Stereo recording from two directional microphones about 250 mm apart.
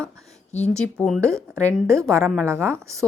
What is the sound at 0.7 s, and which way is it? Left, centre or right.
Speech, centre.